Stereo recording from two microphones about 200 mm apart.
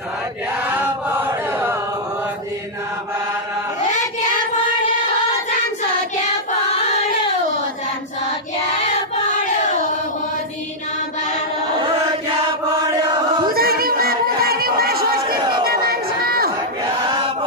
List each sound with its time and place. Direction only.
0.6 s chant: 10° right (ahead or behind)
13.5 s a sound: 50° right (ahead or behind)
15.6 s crowd: 50° right (ahead or behind)
16.8 s chant: 25° right (ahead or behind)